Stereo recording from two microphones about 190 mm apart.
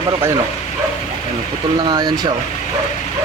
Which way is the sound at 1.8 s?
20° right (ahead or behind).